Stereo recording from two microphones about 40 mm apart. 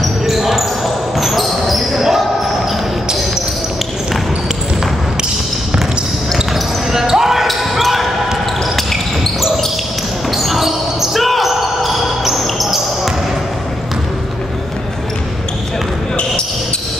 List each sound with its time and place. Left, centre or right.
0.0 s basketball bounce: centre
6.5 s basketball bounce: centre
10.3 s basketball bounce: centre